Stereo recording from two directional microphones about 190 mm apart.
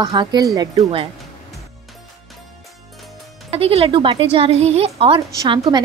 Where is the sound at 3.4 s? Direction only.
30° right (ahead or behind).